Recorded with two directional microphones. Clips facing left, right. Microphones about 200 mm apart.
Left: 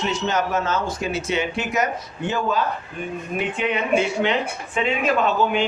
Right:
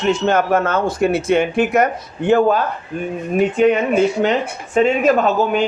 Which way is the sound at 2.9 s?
40° right (ahead or behind).